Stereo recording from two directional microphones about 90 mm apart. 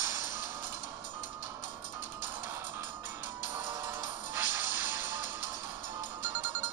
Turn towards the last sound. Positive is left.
turn(degrees=-25)  # may be behind; listen again after turning